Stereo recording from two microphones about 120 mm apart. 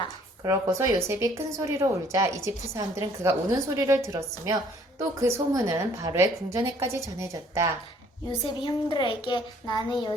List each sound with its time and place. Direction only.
0.4 s a woman's voice: 25° right (ahead or behind)
8.3 s a child's voice: 40° left (ahead or behind)